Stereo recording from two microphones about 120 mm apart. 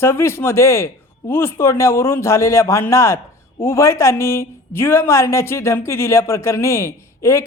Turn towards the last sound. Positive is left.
turn(degrees=25)  # may be behind; listen again after turning